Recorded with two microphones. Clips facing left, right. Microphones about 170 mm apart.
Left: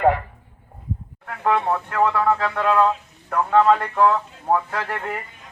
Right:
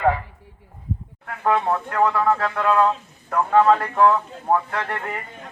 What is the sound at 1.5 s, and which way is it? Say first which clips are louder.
A man's voice: even; centre (ahead or behind).